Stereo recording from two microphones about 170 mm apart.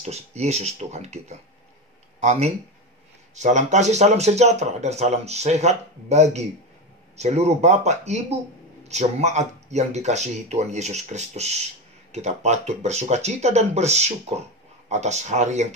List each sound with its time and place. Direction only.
0.0 s speech: 40° right (ahead or behind)